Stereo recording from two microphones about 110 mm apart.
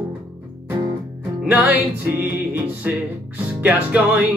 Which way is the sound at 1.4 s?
15° right (ahead or behind).